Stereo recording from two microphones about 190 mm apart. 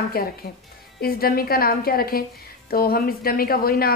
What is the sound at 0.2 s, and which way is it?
A woman's voice, 50° left (ahead or behind).